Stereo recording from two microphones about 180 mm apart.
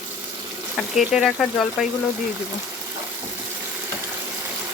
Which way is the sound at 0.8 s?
Centre (ahead or behind).